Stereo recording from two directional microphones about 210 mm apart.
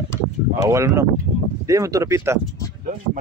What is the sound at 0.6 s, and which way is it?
Speech, 15° right (ahead or behind).